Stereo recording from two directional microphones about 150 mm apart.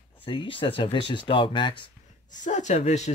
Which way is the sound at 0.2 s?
35° left (ahead or behind).